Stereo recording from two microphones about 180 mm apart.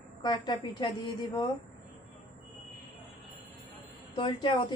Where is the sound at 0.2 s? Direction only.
25° left (ahead or behind).